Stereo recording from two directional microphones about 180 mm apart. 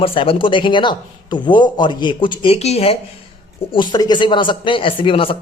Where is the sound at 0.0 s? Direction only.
30° left (ahead or behind).